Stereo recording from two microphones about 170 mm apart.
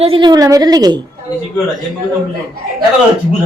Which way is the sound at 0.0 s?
30° right (ahead or behind).